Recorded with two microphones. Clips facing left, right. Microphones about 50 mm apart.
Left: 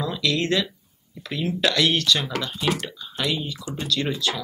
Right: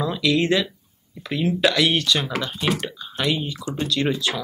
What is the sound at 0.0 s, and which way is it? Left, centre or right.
Speech, centre.